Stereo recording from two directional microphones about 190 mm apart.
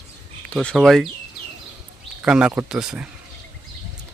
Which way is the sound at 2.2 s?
5° right (ahead or behind).